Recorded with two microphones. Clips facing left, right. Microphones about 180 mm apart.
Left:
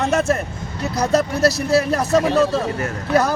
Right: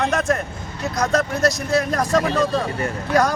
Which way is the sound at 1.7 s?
5° left (ahead or behind).